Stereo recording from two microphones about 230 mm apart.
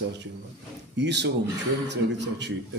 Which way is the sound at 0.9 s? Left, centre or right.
Right.